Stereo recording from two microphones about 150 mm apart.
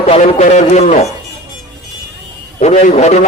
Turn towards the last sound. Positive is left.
turn(degrees=50)  # may be behind; listen again after turning